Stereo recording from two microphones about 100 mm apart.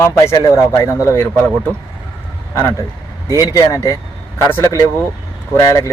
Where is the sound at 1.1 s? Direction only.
15° left (ahead or behind).